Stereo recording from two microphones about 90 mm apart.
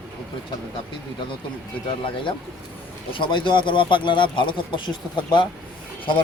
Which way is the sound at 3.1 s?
65° left (ahead or behind).